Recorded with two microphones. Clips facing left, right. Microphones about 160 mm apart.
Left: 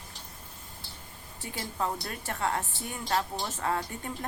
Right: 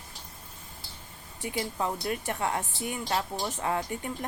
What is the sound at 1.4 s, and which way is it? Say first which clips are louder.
Speech: right 2 dB; 15° right (ahead or behind).